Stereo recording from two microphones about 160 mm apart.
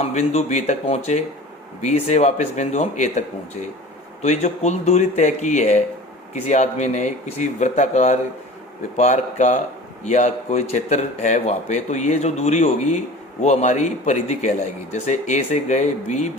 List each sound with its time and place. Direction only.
0.0 s a man's voice: 45° left (ahead or behind)